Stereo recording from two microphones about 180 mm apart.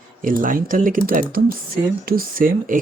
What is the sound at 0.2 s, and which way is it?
Speech, 50° right (ahead or behind).